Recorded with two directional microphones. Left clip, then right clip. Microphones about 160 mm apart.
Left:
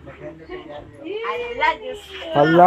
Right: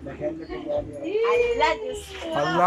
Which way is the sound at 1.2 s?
20° right (ahead or behind).